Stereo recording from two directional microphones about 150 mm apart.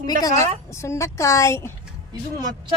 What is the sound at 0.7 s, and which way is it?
Speech, 20° left (ahead or behind).